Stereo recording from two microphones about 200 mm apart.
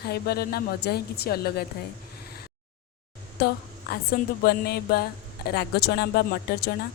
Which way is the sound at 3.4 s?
55° left (ahead or behind).